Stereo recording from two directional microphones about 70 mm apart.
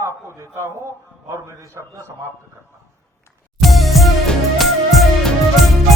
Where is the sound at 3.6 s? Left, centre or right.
Centre.